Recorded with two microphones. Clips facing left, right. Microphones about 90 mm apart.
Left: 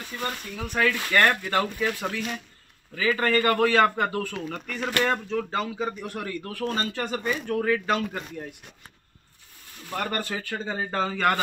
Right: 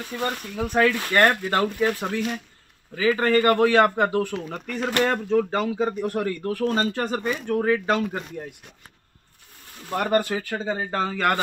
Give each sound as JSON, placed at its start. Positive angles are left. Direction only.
{"t": 0.1, "sound": "speech", "side_deg": -35}
{"t": 0.8, "sound": "a man's voice", "side_deg": -20}
{"t": 1.4, "sound": "a man's voice", "side_deg": -35}
{"t": 4.7, "sound": "speech", "side_deg": -35}
{"t": 9.9, "sound": "a man's voice", "side_deg": -15}